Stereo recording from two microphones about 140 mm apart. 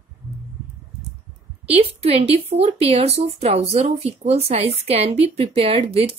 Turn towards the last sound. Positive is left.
turn(degrees=-45)  # may be behind; listen again after turning